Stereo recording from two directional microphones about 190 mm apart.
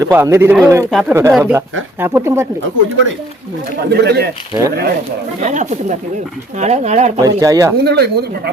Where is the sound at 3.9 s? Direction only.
60° right (ahead or behind).